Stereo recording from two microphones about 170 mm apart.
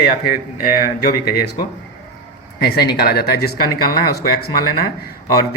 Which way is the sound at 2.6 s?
70° left (ahead or behind).